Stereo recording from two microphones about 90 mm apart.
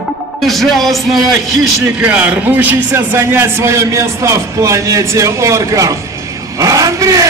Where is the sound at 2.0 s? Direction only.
15° right (ahead or behind).